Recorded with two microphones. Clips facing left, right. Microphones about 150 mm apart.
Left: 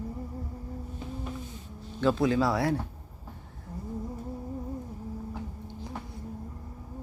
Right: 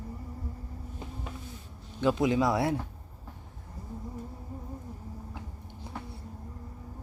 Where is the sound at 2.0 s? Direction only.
15° right (ahead or behind).